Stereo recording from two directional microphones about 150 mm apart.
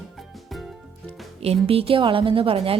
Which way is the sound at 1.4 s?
40° right (ahead or behind).